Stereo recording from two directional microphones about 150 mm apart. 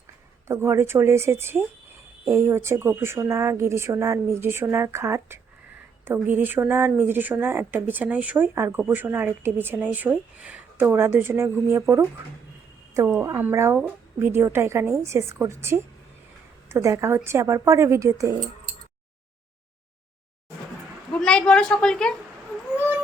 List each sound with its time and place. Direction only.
0.4 s speech: 20° right (ahead or behind)
13.1 s a woman's voice: 15° right (ahead or behind)
21.1 s a woman's voice: 5° left (ahead or behind)